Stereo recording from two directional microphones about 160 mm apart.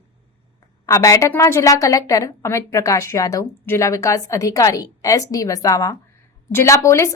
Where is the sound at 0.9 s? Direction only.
20° left (ahead or behind).